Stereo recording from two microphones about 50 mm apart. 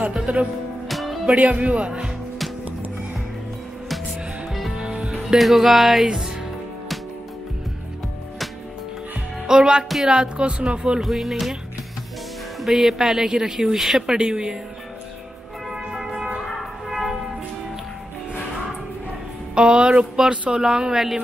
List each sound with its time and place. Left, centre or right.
0.3 s speech: right
0.8 s music: centre
1.2 s speech: right
4.5 s music: centre
4.7 s music: centre
5.1 s speech: centre
9.5 s speech: centre
11.0 s music: centre
12.5 s speech: centre
15.7 s music: centre
16.3 s music: centre
19.5 s speech: centre